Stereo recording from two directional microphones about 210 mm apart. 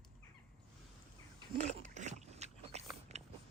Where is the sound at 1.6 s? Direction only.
35° right (ahead or behind).